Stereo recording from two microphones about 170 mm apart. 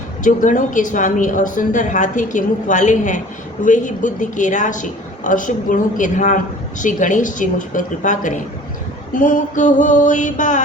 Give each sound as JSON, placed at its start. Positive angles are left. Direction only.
{"t": 0.3, "sound": "a woman's voice", "side_deg": 50}